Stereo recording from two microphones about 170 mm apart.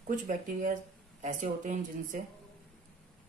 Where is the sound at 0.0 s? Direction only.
50° right (ahead or behind).